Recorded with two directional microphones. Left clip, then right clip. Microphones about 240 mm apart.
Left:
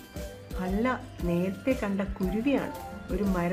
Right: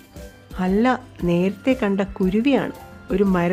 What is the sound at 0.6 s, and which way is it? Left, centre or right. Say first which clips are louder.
Speech: right 10 dB; right.